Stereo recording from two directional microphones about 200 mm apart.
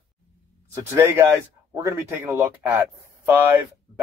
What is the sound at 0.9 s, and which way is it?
Speech, 15° right (ahead or behind).